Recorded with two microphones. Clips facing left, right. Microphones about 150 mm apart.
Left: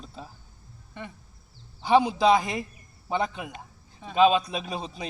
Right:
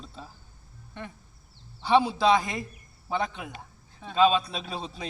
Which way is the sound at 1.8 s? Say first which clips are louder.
Left 2 dB; 15° left (ahead or behind).